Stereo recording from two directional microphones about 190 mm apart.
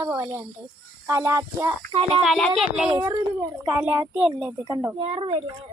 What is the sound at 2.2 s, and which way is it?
Speech, centre (ahead or behind).